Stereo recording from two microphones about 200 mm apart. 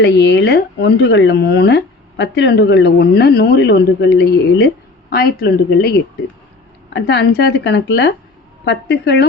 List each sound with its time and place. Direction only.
0.0 s speech: 60° left (ahead or behind)